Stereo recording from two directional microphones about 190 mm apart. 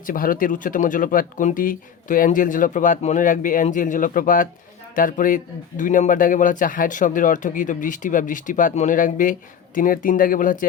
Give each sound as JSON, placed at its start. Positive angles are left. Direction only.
{"t": 0.0, "sound": "speech", "side_deg": 45}